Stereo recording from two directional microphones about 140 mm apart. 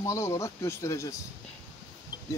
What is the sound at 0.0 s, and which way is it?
Speech, 20° left (ahead or behind).